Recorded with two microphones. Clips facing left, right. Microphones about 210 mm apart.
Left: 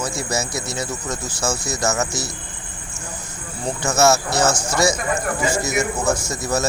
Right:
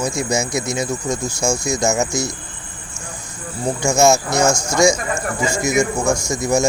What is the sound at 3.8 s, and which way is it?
Speech, 15° right (ahead or behind).